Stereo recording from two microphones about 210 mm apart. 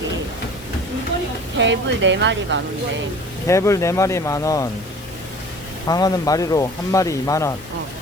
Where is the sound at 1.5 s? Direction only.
60° right (ahead or behind).